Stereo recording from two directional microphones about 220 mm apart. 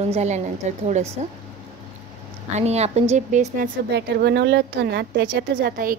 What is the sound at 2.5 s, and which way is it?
Speech, 30° right (ahead or behind).